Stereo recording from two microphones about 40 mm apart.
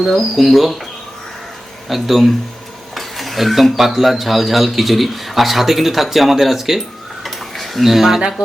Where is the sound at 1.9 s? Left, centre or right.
Centre.